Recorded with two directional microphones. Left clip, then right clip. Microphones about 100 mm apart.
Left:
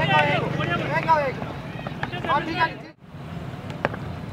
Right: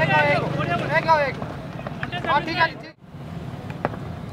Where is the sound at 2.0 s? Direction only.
50° right (ahead or behind).